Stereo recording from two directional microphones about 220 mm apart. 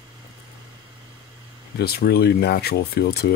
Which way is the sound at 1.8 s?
45° left (ahead or behind).